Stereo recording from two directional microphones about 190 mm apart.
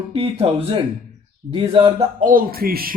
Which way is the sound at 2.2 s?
50° right (ahead or behind).